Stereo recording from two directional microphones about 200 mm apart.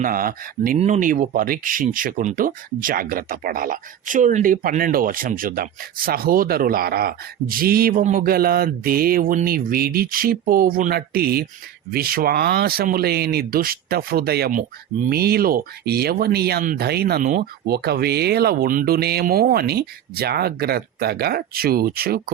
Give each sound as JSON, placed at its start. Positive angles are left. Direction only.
{"t": 0.0, "sound": "speech", "side_deg": -45}